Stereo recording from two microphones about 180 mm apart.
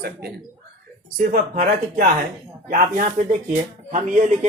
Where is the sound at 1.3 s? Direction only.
45° right (ahead or behind).